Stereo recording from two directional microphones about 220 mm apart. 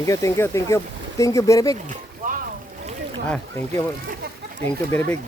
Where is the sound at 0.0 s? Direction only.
15° left (ahead or behind).